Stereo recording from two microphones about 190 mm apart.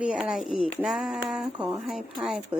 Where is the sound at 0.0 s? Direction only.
5° right (ahead or behind).